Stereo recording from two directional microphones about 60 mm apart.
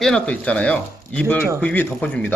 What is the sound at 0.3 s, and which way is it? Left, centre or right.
Speech, left.